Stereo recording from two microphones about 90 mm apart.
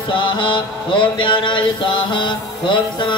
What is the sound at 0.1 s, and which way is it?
Mantra, 65° left (ahead or behind).